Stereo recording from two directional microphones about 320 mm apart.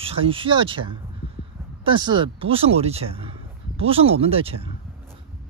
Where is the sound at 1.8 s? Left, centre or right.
Centre.